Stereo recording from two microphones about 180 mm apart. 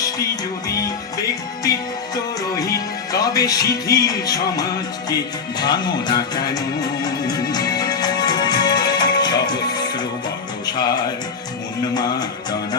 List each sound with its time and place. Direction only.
0.7 s music: 20° left (ahead or behind)
2.6 s speech: 20° left (ahead or behind)
5.0 s music: 20° left (ahead or behind)